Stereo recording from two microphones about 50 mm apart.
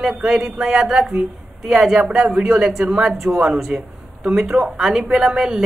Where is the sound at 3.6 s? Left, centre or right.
Centre.